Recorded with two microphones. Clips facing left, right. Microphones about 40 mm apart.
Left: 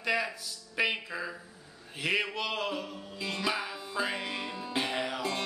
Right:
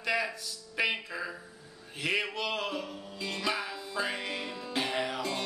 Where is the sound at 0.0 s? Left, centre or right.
Centre.